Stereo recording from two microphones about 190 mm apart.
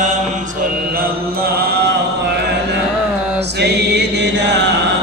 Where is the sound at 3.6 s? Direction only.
60° right (ahead or behind).